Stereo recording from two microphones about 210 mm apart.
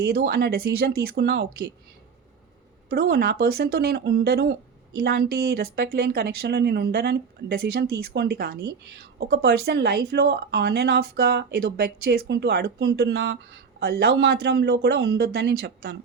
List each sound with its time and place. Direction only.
0.0 s speech: 45° right (ahead or behind)
2.9 s speech: 50° right (ahead or behind)